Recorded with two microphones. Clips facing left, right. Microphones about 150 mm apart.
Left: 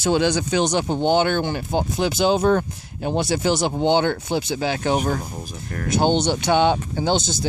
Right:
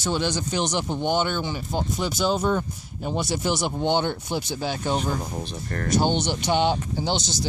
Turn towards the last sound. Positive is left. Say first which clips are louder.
# left 5 dB
turn(degrees=60)  # may be behind; listen again after turning